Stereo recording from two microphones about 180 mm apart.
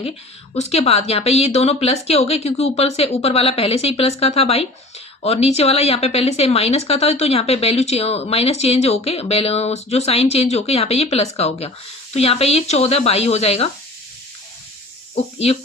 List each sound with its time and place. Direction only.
0.5 s a woman's voice: 35° left (ahead or behind)